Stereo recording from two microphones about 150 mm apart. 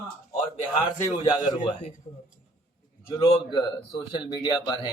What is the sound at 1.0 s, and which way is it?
A man's voice, 30° left (ahead or behind).